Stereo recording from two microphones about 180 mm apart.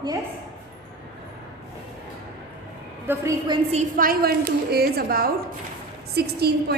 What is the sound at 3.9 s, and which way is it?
A woman's voice, 55° right (ahead or behind).